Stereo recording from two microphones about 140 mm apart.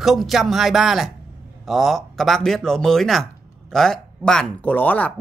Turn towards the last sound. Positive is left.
turn(degrees=10)  # may be behind; listen again after turning